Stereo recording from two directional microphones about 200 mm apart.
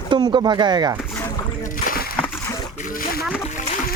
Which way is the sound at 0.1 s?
20° right (ahead or behind).